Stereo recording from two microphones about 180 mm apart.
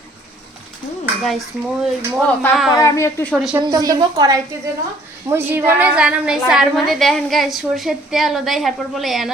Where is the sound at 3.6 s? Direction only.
20° right (ahead or behind).